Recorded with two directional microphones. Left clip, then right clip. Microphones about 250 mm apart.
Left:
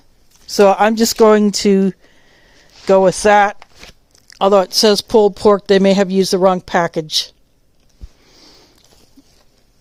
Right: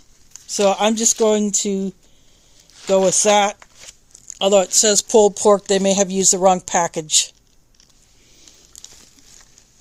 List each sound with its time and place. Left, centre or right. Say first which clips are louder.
0.4 s a sound: left 6 dB; centre
0.8 s speech: left 5 dB; left
1.0 s speech: left 6 dB; left
6.7 s speech: left 3 dB; left
7.0 s speech: even; centre